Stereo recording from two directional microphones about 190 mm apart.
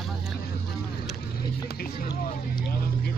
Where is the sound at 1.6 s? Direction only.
50° left (ahead or behind).